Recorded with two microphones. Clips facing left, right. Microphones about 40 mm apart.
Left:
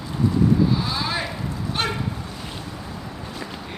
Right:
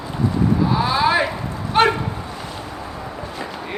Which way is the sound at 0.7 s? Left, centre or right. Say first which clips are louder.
Right 7 dB; right.